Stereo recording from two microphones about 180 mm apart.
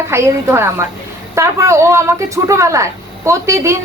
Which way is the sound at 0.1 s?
15° right (ahead or behind).